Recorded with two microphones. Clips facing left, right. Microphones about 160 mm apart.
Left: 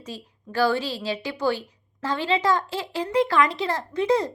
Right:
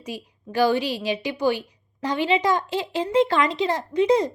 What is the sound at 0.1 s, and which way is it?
A woman's voice, 15° right (ahead or behind).